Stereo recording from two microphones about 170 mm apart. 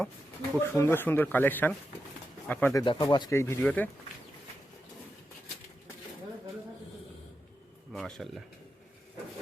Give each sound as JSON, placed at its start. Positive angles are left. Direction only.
{"t": 0.5, "sound": "speech", "side_deg": 15}
{"t": 2.7, "sound": "speech", "side_deg": 25}
{"t": 7.9, "sound": "speech", "side_deg": 0}